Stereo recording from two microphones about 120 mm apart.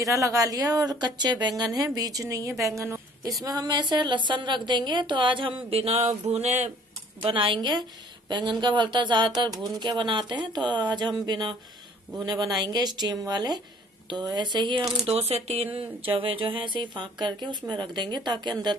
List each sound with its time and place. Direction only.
0.0 s a woman's voice: 25° right (ahead or behind)
3.4 s speech: 35° right (ahead or behind)
5.7 s a sound: 55° right (ahead or behind); by 6.7 s 75° right (ahead or behind)
7.2 s a woman's voice: 45° right (ahead or behind)
15.0 s speech: 60° right (ahead or behind); by 18.8 s 40° right (ahead or behind)